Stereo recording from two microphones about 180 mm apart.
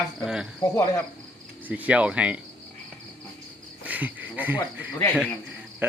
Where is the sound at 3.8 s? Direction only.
10° right (ahead or behind).